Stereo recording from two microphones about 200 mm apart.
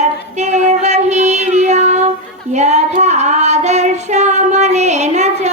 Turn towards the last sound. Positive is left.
turn(degrees=-35)  # may be behind; listen again after turning